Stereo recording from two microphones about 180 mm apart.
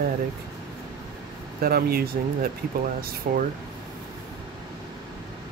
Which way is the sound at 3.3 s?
55° right (ahead or behind).